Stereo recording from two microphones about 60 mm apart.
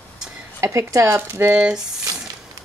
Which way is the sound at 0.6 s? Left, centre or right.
Right.